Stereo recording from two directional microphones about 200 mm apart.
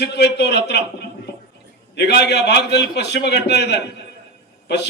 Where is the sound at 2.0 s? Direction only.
55° left (ahead or behind).